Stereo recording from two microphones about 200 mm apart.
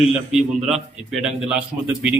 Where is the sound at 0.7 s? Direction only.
Centre (ahead or behind).